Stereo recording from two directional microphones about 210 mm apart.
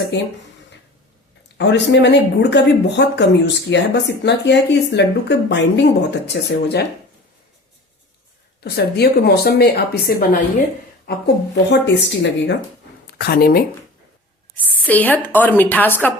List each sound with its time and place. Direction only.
0.1 s speech: 55° left (ahead or behind)
1.5 s speech: 55° left (ahead or behind)
8.6 s a woman's voice: 50° left (ahead or behind)
14.6 s a woman's voice: 10° left (ahead or behind)